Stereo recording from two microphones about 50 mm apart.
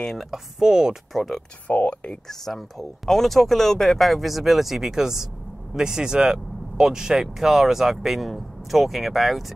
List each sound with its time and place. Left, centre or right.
0.0 s speech: centre
0.3 s speech: centre
1.1 s speech: centre
1.7 s speech: left
2.2 s speech: centre